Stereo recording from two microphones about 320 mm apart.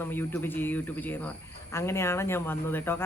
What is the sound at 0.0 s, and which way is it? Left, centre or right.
A man's voice, centre.